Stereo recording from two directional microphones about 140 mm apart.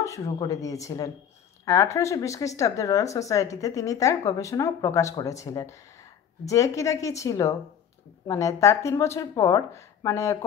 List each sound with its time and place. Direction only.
0.0 s speech: 20° left (ahead or behind)